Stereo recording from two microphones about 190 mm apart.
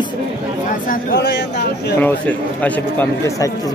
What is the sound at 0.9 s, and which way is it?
Speech, 60° left (ahead or behind).